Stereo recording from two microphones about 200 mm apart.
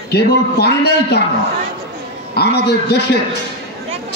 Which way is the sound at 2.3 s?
55° left (ahead or behind).